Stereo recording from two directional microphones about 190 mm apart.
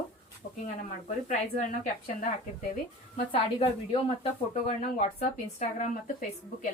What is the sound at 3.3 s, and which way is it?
Speech, 30° left (ahead or behind).